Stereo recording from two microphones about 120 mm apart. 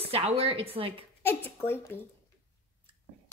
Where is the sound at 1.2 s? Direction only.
20° left (ahead or behind).